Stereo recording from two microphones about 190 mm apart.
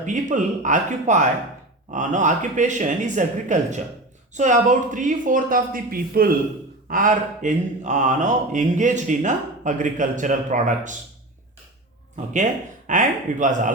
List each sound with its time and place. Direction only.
0.0 s speech: 40° right (ahead or behind)
12.1 s speech: 40° right (ahead or behind)